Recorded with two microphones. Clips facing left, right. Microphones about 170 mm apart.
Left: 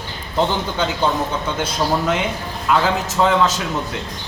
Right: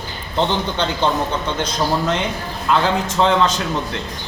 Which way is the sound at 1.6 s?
5° left (ahead or behind).